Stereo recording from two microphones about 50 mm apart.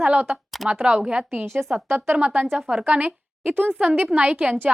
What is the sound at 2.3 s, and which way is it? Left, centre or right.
A woman's voice, right.